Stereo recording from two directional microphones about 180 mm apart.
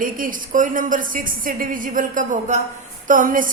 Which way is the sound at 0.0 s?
50° right (ahead or behind).